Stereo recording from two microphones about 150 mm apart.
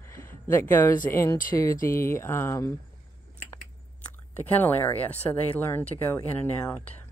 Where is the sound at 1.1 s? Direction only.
20° left (ahead or behind).